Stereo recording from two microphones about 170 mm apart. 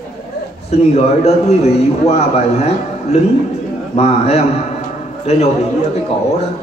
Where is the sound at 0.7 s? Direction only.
40° left (ahead or behind).